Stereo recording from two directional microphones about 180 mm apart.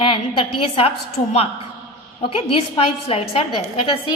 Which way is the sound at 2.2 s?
30° left (ahead or behind).